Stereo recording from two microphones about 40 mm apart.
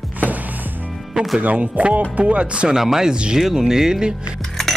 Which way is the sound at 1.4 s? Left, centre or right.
Right.